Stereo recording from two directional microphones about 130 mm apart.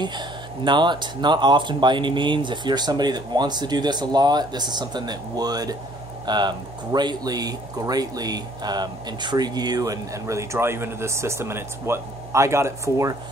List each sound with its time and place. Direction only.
0.0 s speech: 35° right (ahead or behind)